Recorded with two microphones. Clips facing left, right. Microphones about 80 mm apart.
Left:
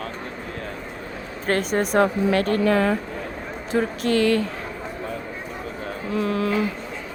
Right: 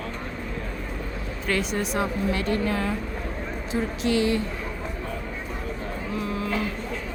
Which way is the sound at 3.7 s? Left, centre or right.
Left.